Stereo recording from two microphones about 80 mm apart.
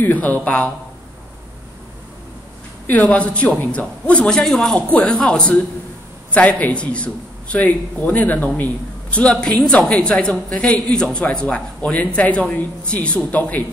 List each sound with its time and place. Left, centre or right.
0.0 s a man's voice: left
2.9 s a man's voice: centre